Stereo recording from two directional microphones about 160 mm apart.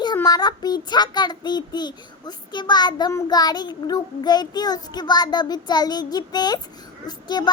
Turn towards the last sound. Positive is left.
turn(degrees=25)  # may be behind; listen again after turning